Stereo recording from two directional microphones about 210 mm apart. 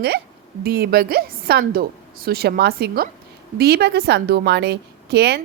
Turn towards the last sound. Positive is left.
turn(degrees=-50)  # may be behind; listen again after turning